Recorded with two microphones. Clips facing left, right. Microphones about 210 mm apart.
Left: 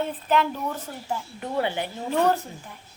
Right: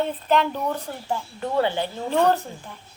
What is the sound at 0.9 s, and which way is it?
Speech, 55° right (ahead or behind).